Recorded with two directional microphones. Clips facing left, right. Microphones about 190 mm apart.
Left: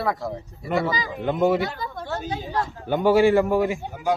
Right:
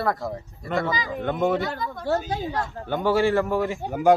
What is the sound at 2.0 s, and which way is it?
Speech, 40° right (ahead or behind).